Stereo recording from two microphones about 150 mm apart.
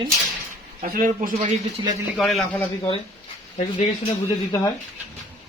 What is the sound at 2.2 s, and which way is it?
Speech, centre (ahead or behind).